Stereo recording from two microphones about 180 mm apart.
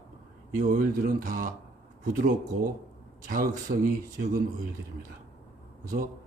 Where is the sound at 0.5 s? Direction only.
45° right (ahead or behind).